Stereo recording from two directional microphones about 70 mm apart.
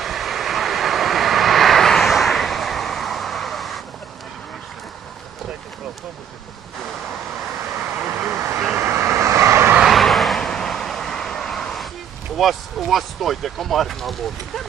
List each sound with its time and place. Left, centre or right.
0.0 s vehicle: centre
7.9 s vehicle: right
8.4 s vehicle: right
9.8 s vehicle: centre
12.4 s speech: centre